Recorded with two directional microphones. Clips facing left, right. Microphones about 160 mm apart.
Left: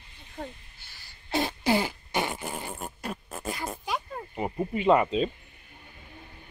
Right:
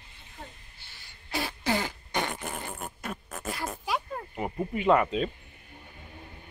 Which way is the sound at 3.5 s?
Centre (ahead or behind).